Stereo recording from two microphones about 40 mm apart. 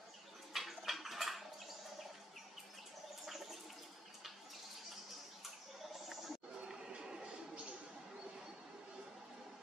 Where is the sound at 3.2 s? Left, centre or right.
Centre.